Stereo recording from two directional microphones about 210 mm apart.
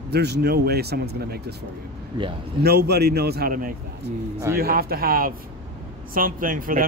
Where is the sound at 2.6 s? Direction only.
50° right (ahead or behind).